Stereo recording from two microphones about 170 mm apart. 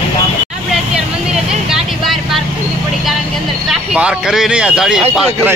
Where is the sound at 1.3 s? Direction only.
5° right (ahead or behind).